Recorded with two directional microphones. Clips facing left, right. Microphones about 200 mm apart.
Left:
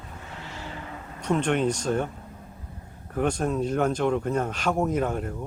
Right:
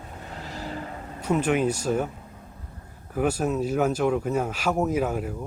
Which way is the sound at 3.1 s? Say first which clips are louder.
Right 1 dB; 5° right (ahead or behind).